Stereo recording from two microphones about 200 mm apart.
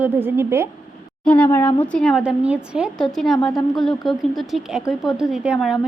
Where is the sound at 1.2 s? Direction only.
5° left (ahead or behind).